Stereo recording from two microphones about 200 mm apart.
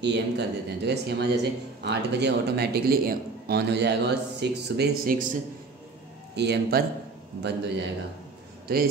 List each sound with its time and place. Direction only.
0.0 s speech: 60° right (ahead or behind)
6.3 s speech: 55° right (ahead or behind)